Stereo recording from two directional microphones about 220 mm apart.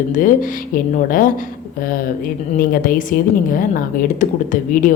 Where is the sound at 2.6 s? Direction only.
40° left (ahead or behind).